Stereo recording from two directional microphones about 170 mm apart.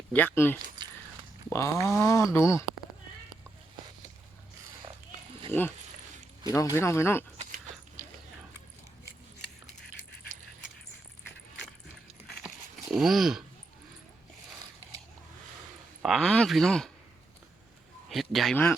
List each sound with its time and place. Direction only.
0.1 s speech: 10° left (ahead or behind)
5.5 s speech: 15° left (ahead or behind)
7.3 s dog: 50° right (ahead or behind)
12.9 s speech: centre (ahead or behind)
16.0 s speech: centre (ahead or behind)
18.1 s speech: centre (ahead or behind)